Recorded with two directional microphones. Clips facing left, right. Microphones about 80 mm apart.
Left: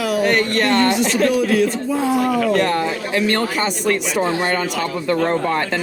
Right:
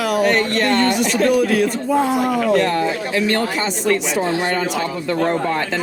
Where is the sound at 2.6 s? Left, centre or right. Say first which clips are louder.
Right 1 dB; left.